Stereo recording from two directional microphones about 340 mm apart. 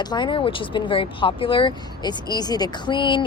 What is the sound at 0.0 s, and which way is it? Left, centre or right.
Speech, centre.